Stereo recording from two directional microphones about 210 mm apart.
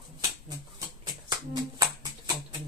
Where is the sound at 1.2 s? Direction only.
20° right (ahead or behind).